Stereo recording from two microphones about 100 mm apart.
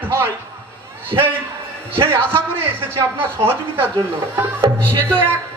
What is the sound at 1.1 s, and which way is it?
Music, 45° right (ahead or behind).